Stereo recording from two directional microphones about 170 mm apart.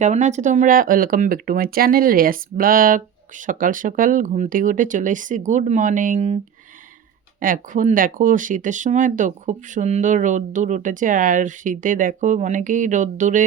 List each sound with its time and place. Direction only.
0.0 s speech: 45° right (ahead or behind)
7.3 s speech: 50° right (ahead or behind)